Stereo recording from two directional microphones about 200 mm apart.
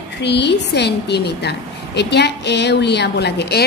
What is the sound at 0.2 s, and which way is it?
A woman's voice, 55° left (ahead or behind).